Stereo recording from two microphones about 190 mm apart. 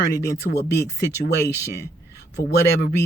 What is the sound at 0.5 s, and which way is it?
A man's voice, 60° left (ahead or behind).